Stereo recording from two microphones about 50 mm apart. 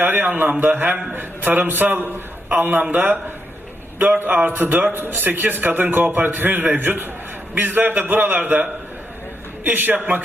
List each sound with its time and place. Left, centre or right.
0.0 s a man's voice: right
9.6 s a man's voice: right